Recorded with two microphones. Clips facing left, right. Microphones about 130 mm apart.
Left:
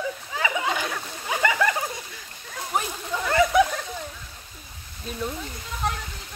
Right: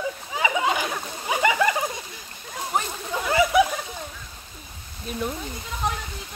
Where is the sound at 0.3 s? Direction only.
20° right (ahead or behind).